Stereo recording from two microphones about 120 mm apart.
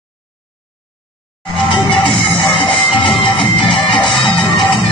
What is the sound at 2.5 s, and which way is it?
Music, 40° left (ahead or behind).